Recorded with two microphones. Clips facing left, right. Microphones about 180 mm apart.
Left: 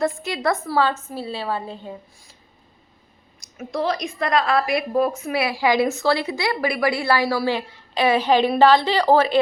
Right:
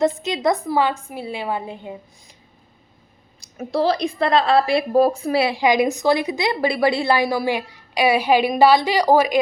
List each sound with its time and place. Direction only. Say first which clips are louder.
0.0 s a woman's voice: right 3 dB; 20° right (ahead or behind)
3.4 s a woman's voice: right 4 dB; 30° right (ahead or behind); by 9.4 s 10° right (ahead or behind)